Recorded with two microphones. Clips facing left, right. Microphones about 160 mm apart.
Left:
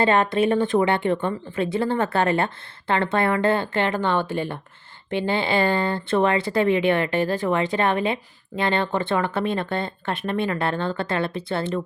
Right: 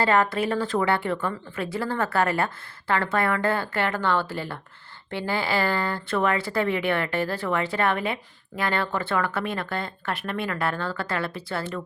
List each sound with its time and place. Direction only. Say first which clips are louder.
0.0 s speech: left 3 dB; 25° left (ahead or behind)